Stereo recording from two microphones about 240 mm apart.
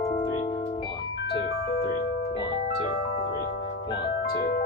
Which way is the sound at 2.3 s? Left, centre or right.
Centre.